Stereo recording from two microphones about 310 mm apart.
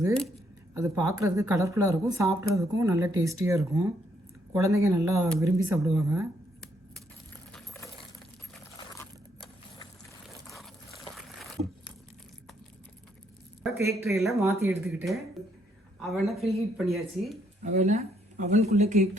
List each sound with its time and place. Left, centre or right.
0.7 s a woman's voice: centre
7.5 s a sound: centre
13.7 s a woman's voice: centre
17.7 s speech: right